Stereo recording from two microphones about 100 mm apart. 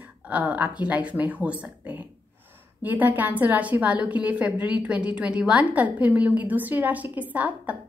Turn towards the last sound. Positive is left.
turn(degrees=-15)  # may be behind; listen again after turning